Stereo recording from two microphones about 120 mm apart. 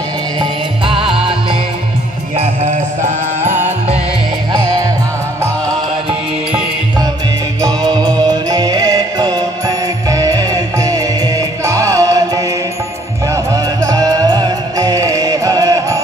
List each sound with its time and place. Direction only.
0.4 s music: 45° right (ahead or behind)
2.3 s music: 80° right
7.6 s music: 35° right (ahead or behind)